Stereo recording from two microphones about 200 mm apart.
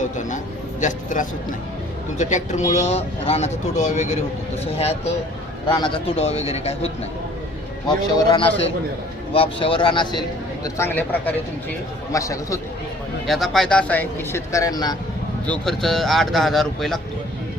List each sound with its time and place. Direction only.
0.8 s a man's voice: 40° left (ahead or behind); by 12.5 s 15° left (ahead or behind)
13.2 s speech: centre (ahead or behind); by 14.9 s 20° left (ahead or behind)
15.4 s speech: 5° left (ahead or behind)